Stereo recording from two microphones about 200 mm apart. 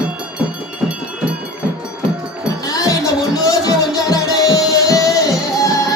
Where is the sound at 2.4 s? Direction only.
15° left (ahead or behind).